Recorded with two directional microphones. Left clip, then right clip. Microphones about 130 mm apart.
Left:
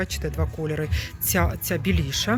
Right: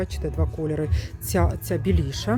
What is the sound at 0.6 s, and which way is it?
Speech, 35° right (ahead or behind).